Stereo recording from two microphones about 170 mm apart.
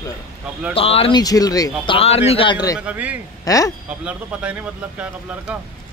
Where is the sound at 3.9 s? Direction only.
10° right (ahead or behind).